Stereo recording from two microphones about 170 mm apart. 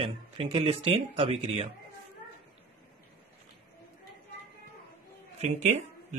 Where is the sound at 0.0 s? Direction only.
35° right (ahead or behind).